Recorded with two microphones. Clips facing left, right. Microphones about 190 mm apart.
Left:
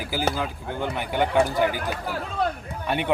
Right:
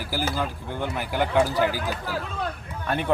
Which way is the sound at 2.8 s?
Centre (ahead or behind).